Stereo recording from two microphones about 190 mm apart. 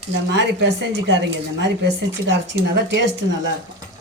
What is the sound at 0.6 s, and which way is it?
Speech, 70° right (ahead or behind).